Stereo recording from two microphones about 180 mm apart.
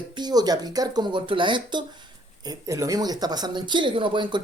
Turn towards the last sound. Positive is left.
turn(degrees=-25)  # may be behind; listen again after turning